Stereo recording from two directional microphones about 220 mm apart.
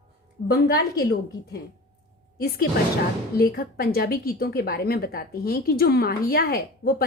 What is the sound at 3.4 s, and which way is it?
A woman's voice, 45° left (ahead or behind).